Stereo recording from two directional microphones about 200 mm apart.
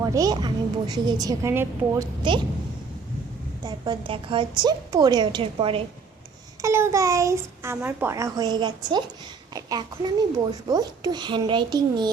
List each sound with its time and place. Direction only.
0.0 s a child's voice: 15° right (ahead or behind)
3.6 s a child's voice: 25° right (ahead or behind)
6.6 s a child's voice: 15° right (ahead or behind)